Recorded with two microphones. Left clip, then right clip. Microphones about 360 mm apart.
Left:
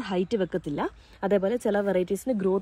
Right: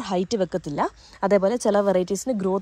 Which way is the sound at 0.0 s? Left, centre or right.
Centre.